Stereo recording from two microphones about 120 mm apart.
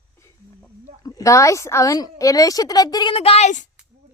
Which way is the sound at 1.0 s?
30° left (ahead or behind).